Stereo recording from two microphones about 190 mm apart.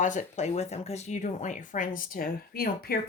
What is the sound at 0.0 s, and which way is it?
Speech, 40° left (ahead or behind).